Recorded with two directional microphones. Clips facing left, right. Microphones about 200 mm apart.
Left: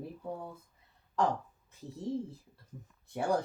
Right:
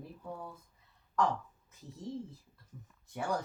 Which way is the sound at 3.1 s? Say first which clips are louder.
Left 5 dB; 35° left (ahead or behind).